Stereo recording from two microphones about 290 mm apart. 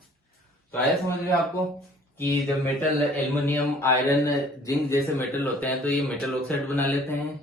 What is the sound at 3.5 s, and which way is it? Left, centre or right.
Speech, centre.